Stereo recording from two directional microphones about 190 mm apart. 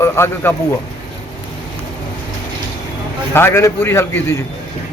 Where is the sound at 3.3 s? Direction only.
10° left (ahead or behind).